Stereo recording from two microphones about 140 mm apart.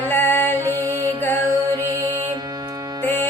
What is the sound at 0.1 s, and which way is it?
Music, 15° left (ahead or behind).